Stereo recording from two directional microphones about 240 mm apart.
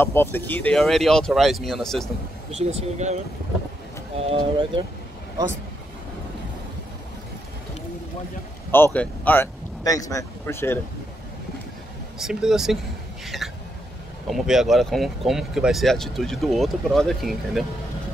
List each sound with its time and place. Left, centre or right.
0.0 s speech: centre
2.5 s speech: right
4.2 s speech: right
8.7 s speech: centre
12.2 s speech: centre
13.2 s hiccup: centre
14.3 s speech: centre